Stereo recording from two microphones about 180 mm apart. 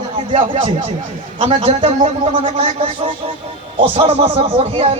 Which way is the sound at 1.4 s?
35° right (ahead or behind).